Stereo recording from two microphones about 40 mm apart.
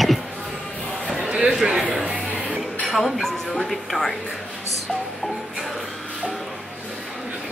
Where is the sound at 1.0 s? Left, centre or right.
Right.